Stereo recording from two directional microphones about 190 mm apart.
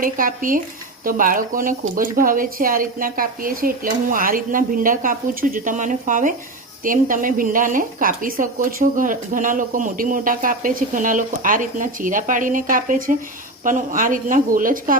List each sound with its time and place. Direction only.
0.0 s a woman's voice: 45° right (ahead or behind)